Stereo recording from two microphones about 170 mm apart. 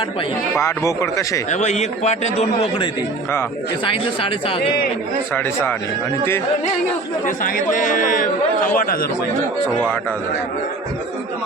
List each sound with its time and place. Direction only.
0.5 s speech: 20° left (ahead or behind)
1.5 s a man's voice: 45° left (ahead or behind)
3.8 s a man's voice: 30° left (ahead or behind)
5.3 s speech: 15° left (ahead or behind)
7.3 s speech: 50° left (ahead or behind)